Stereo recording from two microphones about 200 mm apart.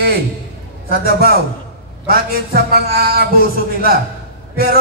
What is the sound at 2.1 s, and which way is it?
A man's voice, 50° right (ahead or behind).